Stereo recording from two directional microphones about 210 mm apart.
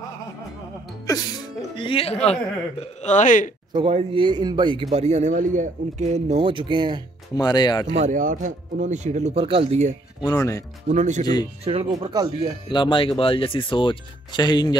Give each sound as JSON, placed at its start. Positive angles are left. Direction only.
{"t": 1.0, "sound": "music", "side_deg": 15}
{"t": 3.0, "sound": "speech", "side_deg": 35}
{"t": 3.7, "sound": "a man's voice", "side_deg": -25}
{"t": 7.3, "sound": "speech", "side_deg": 20}
{"t": 7.9, "sound": "speech", "side_deg": -35}
{"t": 10.2, "sound": "speech", "side_deg": 15}
{"t": 10.9, "sound": "a man's voice", "side_deg": -35}
{"t": 12.6, "sound": "speech", "side_deg": 20}